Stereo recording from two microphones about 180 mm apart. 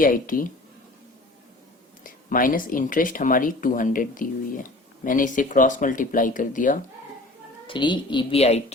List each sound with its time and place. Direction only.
0.0 s speech: 50° left (ahead or behind)
2.0 s speech: 50° left (ahead or behind)
7.7 s a woman's voice: 25° left (ahead or behind)